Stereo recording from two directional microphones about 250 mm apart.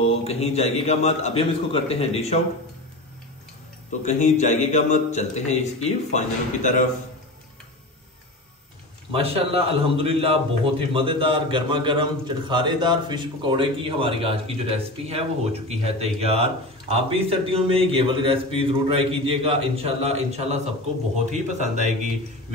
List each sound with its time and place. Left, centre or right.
0.0 s a man's voice: left
4.0 s a man's voice: left
9.1 s a man's voice: right